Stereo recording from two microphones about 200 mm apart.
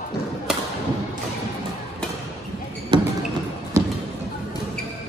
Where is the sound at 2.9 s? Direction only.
25° right (ahead or behind).